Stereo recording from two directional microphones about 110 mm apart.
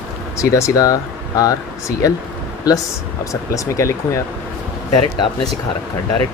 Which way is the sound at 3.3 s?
30° left (ahead or behind).